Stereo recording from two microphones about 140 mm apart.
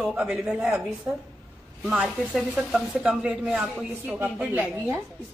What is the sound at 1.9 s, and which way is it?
Speech, 10° right (ahead or behind).